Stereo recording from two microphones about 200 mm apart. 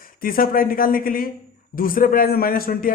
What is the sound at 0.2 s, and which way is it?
A man's voice, 45° left (ahead or behind).